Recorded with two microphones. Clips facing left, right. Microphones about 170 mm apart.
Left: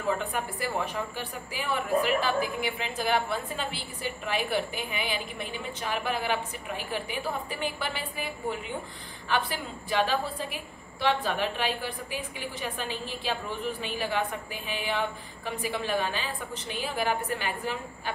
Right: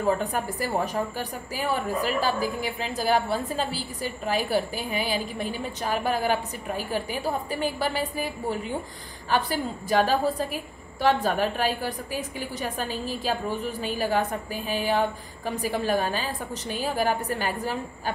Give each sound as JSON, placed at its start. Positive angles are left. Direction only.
{"t": 0.0, "sound": "a woman's voice", "side_deg": -40}